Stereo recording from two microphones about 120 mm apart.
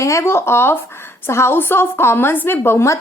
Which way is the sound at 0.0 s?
25° left (ahead or behind).